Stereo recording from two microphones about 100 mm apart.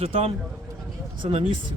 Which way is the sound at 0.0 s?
75° right (ahead or behind).